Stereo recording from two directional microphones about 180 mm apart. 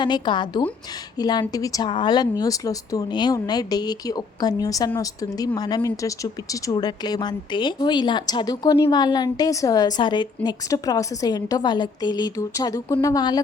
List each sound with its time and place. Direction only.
0.0 s speech: 25° left (ahead or behind)